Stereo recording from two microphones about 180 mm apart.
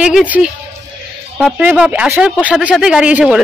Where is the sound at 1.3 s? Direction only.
5° right (ahead or behind).